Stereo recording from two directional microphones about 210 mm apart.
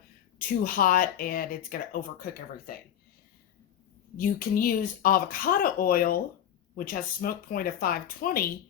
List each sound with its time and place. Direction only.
0.3 s speech: 40° left (ahead or behind)
4.2 s speech: 40° left (ahead or behind)